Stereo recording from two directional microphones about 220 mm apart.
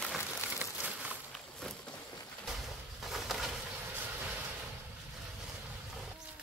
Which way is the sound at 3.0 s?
Centre (ahead or behind).